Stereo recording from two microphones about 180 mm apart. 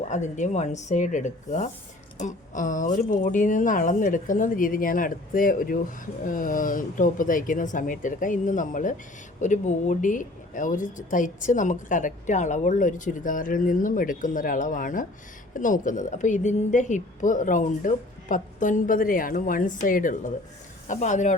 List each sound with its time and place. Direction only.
0.1 s a woman's voice: 40° left (ahead or behind)